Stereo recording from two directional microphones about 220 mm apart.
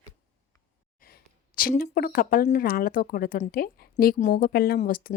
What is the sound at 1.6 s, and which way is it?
Speech, 40° left (ahead or behind).